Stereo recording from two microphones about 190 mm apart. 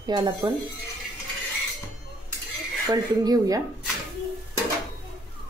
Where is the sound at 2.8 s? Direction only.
20° right (ahead or behind).